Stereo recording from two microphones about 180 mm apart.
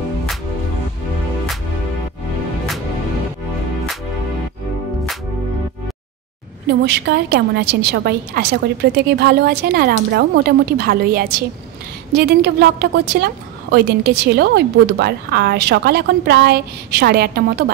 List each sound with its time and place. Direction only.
6.8 s a woman's voice: 70° right (ahead or behind)